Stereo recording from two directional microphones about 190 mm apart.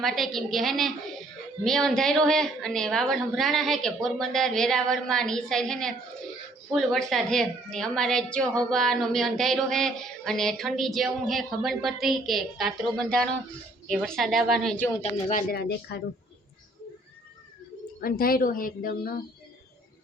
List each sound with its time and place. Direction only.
0.0 s a woman's voice: centre (ahead or behind)
15.3 s speech: 45° left (ahead or behind)
18.0 s speech: 50° left (ahead or behind)